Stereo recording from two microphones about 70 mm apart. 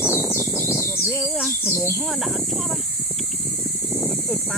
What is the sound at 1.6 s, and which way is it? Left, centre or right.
Bird, left.